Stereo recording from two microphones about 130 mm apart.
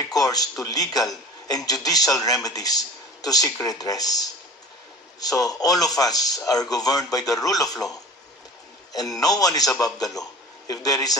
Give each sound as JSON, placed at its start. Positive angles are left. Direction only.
{"t": 0.1, "sound": "a man's voice", "side_deg": 30}
{"t": 5.5, "sound": "a man's voice", "side_deg": 30}
{"t": 8.9, "sound": "a man's voice", "side_deg": 30}